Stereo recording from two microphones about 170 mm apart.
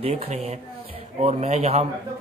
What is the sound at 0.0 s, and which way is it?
A man's voice, 40° right (ahead or behind).